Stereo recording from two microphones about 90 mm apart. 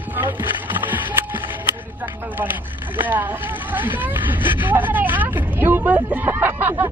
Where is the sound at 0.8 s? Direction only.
20° right (ahead or behind).